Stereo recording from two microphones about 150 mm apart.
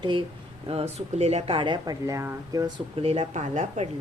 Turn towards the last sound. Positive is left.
turn(degrees=-50)  # may be behind; listen again after turning